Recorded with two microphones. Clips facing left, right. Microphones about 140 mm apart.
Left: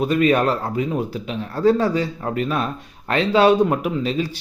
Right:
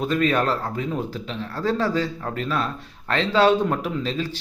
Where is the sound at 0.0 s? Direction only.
15° left (ahead or behind).